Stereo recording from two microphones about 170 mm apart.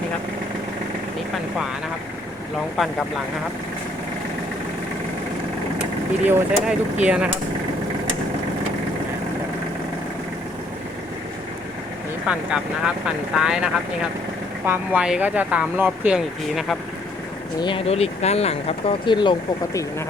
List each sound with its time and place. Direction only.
6.2 s speech: 10° right (ahead or behind)
12.3 s speech: 5° right (ahead or behind)
17.6 s speech: 30° left (ahead or behind)